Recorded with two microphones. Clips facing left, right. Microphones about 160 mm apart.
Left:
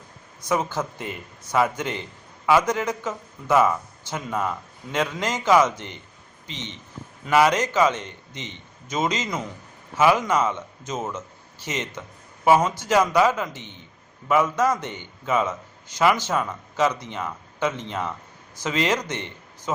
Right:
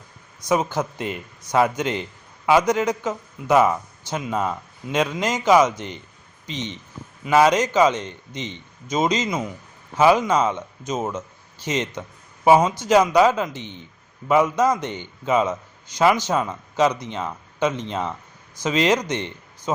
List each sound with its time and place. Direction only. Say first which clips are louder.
0.4 s a man's voice: right 3 dB; 15° right (ahead or behind)